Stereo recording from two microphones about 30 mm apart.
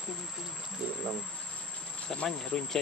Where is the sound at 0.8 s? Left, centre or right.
Right.